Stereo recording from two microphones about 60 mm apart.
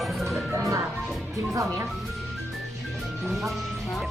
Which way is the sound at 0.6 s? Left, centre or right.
Right.